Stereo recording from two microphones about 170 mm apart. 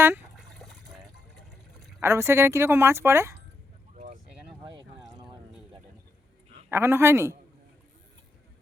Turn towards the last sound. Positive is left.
turn(degrees=-15)  # may be behind; listen again after turning